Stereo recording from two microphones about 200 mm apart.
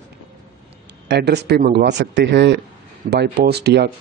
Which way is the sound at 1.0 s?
55° right (ahead or behind).